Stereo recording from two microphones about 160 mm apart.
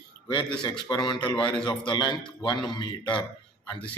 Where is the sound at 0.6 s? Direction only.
30° left (ahead or behind).